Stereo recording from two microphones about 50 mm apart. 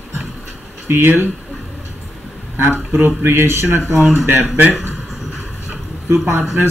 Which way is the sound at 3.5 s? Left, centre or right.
Right.